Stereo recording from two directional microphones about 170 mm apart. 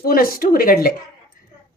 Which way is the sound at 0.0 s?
60° left (ahead or behind).